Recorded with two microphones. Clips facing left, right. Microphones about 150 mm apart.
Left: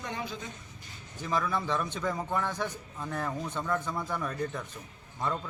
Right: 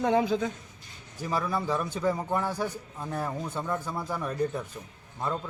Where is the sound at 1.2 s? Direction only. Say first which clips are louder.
Right 1 dB; 10° right (ahead or behind).